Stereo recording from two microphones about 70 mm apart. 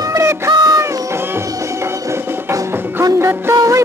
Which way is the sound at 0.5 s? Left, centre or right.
Right.